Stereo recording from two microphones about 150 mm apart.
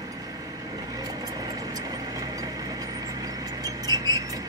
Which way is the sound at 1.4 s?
25° right (ahead or behind).